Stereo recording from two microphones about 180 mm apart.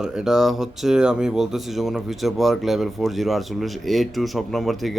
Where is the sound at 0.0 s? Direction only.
5° right (ahead or behind).